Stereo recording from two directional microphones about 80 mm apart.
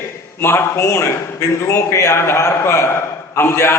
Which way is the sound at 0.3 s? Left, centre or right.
Left.